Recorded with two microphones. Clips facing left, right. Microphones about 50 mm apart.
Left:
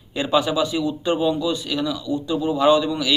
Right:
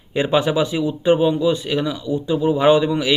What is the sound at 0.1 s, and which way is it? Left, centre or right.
A man's voice, right.